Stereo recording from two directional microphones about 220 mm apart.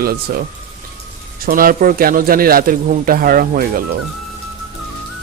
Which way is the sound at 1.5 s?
40° right (ahead or behind).